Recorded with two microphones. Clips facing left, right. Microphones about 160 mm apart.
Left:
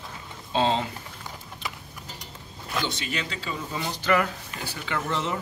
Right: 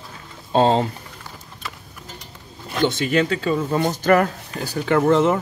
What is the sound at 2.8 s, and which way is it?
Speech, 55° right (ahead or behind).